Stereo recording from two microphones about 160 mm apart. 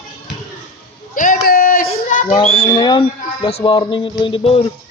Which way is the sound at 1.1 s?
55° left (ahead or behind).